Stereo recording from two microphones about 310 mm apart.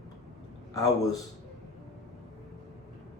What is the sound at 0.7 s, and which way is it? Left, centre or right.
Speech, centre.